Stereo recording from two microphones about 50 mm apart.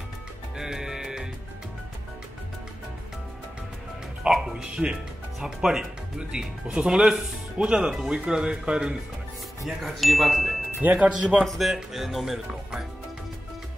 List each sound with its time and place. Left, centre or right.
0.6 s music: centre
4.2 s speech: centre
9.8 s speech: centre
10.8 s speech: right
11.1 s a man's voice: right
11.4 s speech: centre